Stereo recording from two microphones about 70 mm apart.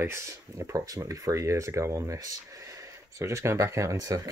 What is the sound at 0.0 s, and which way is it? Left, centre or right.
Speech, right.